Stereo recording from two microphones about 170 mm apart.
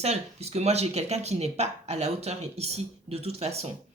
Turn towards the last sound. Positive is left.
turn(degrees=-35)  # may be behind; listen again after turning